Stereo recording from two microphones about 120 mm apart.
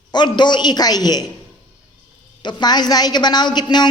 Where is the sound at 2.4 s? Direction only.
35° left (ahead or behind).